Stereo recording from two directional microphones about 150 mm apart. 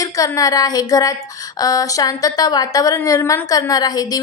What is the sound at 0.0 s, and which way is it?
A woman's voice, 25° left (ahead or behind).